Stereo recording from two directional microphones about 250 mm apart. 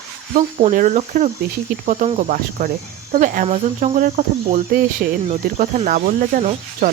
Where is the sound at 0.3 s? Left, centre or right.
Right.